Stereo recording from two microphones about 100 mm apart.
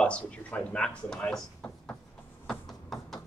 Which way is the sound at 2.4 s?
Centre (ahead or behind).